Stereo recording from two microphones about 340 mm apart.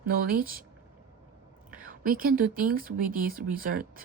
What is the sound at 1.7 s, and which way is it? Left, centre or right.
Speech, right.